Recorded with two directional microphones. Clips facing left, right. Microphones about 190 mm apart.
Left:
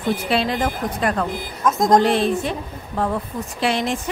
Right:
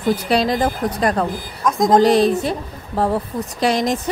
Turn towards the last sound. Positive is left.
turn(degrees=-40)  # may be behind; listen again after turning